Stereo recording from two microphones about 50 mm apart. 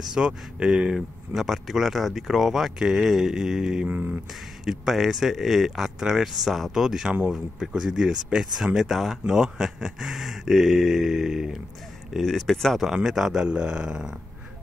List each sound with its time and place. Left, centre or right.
0.1 s speech: centre
0.9 s speech: centre
3.9 s speech: right
4.6 s speech: centre
13.5 s speech: centre